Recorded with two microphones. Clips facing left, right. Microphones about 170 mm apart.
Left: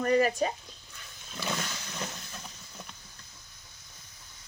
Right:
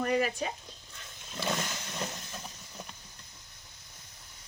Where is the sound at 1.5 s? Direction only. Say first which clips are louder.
Right 1 dB; 15° right (ahead or behind).